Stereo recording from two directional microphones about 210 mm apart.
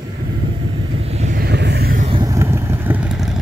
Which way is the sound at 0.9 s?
30° right (ahead or behind).